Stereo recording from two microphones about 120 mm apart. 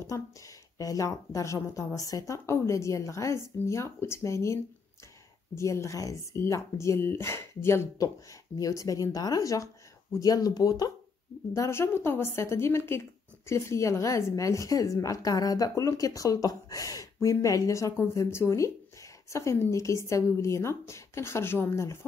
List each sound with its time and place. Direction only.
0.1 s speech: 25° left (ahead or behind)
5.6 s speech: 25° left (ahead or behind)